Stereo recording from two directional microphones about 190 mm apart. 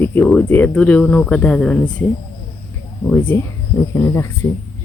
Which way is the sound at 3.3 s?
10° left (ahead or behind).